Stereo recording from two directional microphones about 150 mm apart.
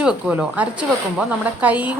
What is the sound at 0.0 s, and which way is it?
Speech, 5° right (ahead or behind).